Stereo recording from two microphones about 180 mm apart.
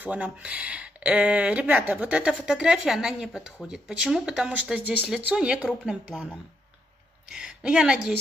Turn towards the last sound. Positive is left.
turn(degrees=-5)  # may be behind; listen again after turning